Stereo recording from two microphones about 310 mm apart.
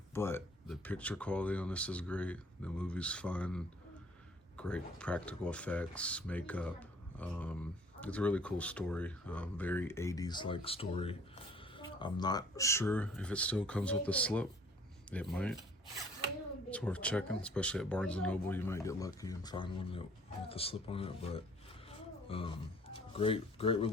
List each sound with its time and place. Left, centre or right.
0.1 s speech: centre
16.6 s speech: centre
21.8 s a sound: centre